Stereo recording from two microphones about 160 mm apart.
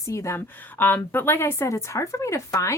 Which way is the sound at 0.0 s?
20° left (ahead or behind).